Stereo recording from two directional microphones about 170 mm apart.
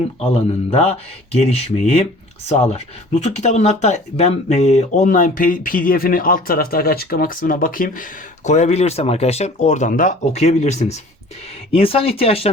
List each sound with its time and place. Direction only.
0.3 s speech: 35° left (ahead or behind); by 8.0 s 55° left (ahead or behind)
8.4 s speech: 40° left (ahead or behind)